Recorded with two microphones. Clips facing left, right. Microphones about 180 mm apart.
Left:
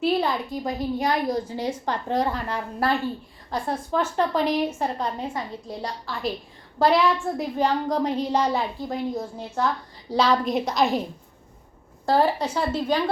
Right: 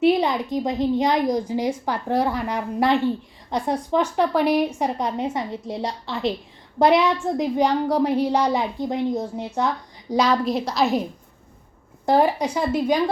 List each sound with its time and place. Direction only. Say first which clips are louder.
0.0 s a woman's voice: right 4 dB; 20° right (ahead or behind)
12.0 s a woman's voice: right 2 dB; 15° right (ahead or behind)